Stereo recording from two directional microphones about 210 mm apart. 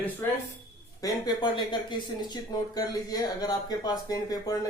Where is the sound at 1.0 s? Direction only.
20° left (ahead or behind).